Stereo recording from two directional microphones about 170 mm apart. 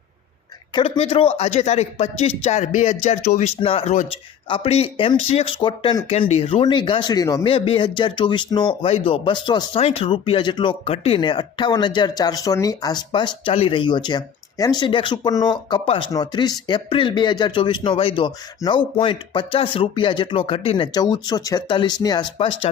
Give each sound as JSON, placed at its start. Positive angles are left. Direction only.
{"t": 0.7, "sound": "a man's voice", "side_deg": 35}